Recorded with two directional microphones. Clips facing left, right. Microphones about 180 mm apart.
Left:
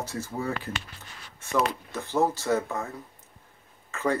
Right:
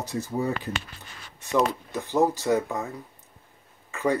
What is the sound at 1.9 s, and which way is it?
Speech, 15° right (ahead or behind).